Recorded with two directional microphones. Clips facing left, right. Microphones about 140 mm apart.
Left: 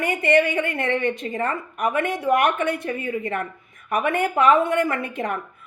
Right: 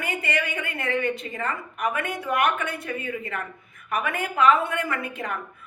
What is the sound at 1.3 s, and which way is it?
Speech, 40° left (ahead or behind).